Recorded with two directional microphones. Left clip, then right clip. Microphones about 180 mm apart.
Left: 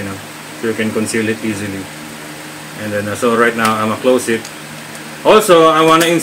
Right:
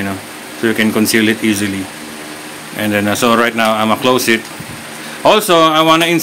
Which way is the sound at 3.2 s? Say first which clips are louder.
Left 1 dB; 60° right (ahead or behind).